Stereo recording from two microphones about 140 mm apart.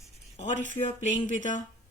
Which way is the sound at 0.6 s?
60° left (ahead or behind).